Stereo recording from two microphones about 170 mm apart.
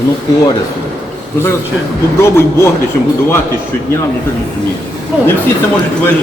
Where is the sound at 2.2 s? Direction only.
15° left (ahead or behind).